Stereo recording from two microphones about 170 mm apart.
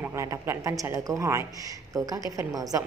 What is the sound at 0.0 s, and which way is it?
Speech, 15° right (ahead or behind).